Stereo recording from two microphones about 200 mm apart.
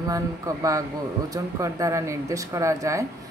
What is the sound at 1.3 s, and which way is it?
Speech, 15° right (ahead or behind).